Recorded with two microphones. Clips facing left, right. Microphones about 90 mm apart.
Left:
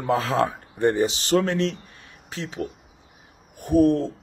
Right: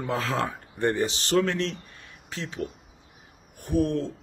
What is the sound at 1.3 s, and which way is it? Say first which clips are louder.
Speech: left 2 dB; 40° left (ahead or behind).